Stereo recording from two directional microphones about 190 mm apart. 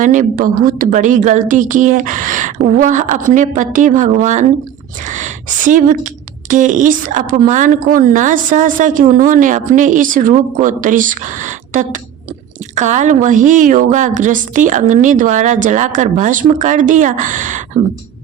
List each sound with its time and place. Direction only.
0.0 s a woman's voice: 45° right (ahead or behind)